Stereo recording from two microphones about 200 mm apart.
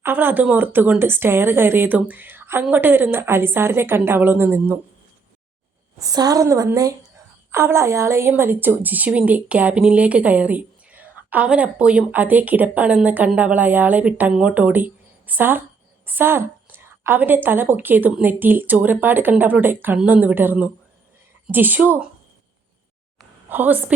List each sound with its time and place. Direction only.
0.0 s a woman's voice: 10° right (ahead or behind)
6.0 s a woman's voice: 20° right (ahead or behind)
23.5 s a woman's voice: 10° right (ahead or behind)